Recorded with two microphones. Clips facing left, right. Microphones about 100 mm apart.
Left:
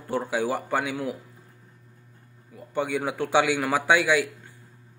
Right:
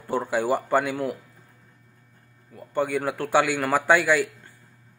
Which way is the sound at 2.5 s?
Centre (ahead or behind).